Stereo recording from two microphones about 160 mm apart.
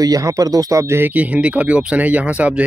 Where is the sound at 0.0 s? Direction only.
20° right (ahead or behind).